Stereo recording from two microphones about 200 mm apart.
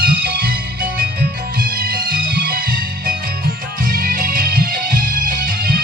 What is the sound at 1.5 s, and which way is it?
Music, 45° right (ahead or behind).